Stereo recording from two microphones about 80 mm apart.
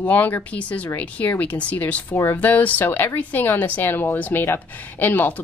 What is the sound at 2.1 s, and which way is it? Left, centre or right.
Speech, left.